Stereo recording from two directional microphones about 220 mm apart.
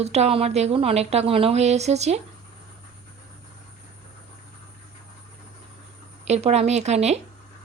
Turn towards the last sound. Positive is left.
turn(degrees=-30)  # may be behind; listen again after turning